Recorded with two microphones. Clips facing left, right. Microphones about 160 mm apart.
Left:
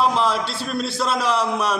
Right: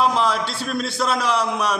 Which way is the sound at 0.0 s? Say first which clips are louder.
Even; centre (ahead or behind).